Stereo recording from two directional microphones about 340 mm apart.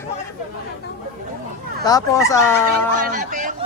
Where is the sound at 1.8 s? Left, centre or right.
Centre.